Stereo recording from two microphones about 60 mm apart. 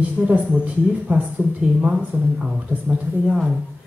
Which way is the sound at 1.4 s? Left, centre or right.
Right.